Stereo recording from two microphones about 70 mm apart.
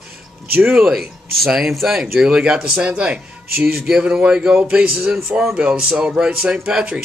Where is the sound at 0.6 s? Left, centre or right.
Right.